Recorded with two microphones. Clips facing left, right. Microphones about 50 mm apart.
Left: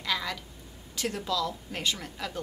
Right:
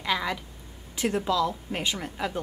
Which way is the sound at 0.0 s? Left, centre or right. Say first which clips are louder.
Right 4 dB; right.